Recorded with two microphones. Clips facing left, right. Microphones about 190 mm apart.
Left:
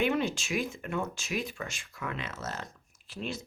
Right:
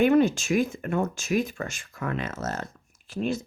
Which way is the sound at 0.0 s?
45° right (ahead or behind).